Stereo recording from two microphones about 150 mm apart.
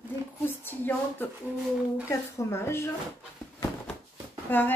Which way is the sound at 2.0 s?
20° left (ahead or behind).